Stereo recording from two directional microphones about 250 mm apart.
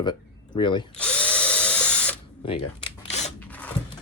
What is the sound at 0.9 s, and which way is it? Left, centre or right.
Drill, centre.